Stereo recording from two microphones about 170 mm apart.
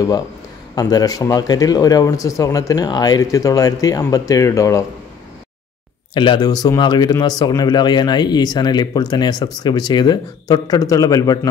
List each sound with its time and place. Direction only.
0.7 s speech: 20° left (ahead or behind)
6.1 s speech: 30° left (ahead or behind)